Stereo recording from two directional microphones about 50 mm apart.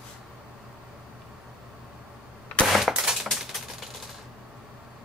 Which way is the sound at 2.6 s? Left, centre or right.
Centre.